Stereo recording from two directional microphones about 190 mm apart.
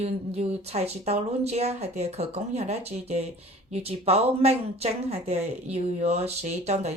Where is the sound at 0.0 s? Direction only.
35° right (ahead or behind).